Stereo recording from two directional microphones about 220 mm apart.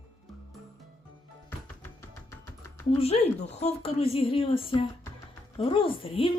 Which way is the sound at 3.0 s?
30° left (ahead or behind).